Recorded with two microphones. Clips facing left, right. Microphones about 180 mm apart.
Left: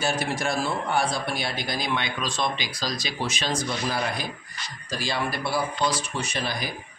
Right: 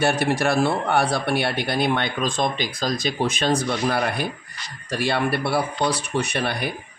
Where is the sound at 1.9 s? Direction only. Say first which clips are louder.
Right 6 dB; 50° right (ahead or behind).